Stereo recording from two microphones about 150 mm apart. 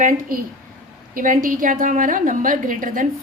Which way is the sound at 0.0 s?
70° right (ahead or behind).